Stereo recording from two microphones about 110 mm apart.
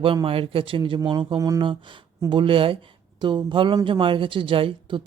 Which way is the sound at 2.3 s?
50° right (ahead or behind).